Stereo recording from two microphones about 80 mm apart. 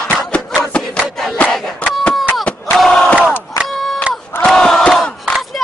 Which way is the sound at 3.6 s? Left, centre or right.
Centre.